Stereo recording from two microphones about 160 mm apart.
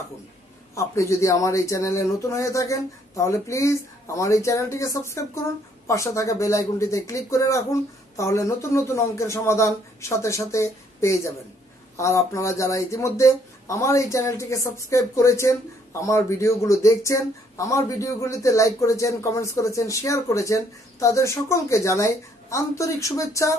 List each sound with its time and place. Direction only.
0.7 s speech: 20° left (ahead or behind)